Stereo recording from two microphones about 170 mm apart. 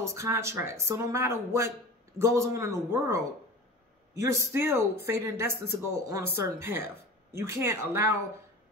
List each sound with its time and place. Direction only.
0.0 s speech: 15° right (ahead or behind)